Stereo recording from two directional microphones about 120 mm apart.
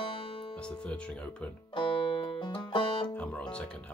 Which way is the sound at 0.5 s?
10° left (ahead or behind).